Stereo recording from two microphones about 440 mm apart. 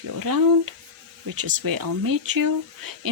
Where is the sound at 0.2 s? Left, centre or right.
Right.